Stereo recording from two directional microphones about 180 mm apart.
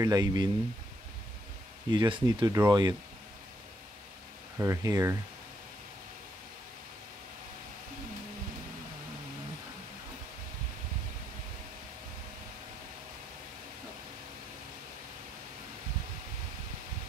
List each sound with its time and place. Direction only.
0.0 s speech: 20° right (ahead or behind)
1.9 s speech: 25° right (ahead or behind)
4.6 s speech: 15° right (ahead or behind)